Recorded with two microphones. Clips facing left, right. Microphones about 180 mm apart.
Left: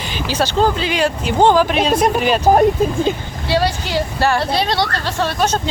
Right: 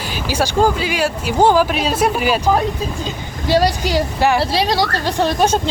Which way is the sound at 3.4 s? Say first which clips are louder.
Right 3 dB; 40° right (ahead or behind).